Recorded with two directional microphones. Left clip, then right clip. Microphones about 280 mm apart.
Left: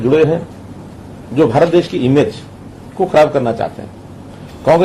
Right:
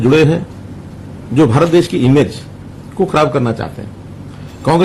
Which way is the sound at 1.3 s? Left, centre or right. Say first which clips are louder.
Even; right.